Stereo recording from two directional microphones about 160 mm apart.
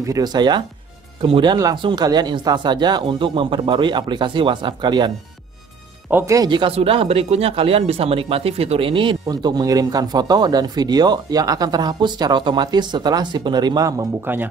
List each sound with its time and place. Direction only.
0.0 s speech: 25° right (ahead or behind)
6.0 s speech: 15° right (ahead or behind)